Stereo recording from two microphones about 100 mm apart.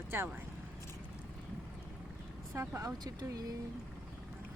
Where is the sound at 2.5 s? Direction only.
30° right (ahead or behind).